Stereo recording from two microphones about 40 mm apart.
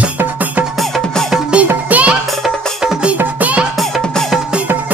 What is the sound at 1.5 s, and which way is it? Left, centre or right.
Music, right.